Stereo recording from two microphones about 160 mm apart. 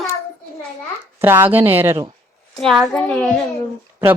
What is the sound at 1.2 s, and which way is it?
Speech, 15° right (ahead or behind).